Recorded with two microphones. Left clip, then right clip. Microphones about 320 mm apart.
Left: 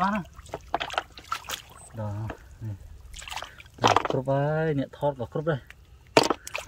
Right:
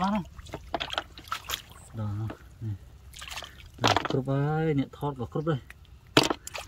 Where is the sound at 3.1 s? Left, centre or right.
Centre.